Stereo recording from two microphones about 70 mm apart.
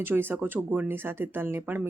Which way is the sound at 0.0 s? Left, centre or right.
Right.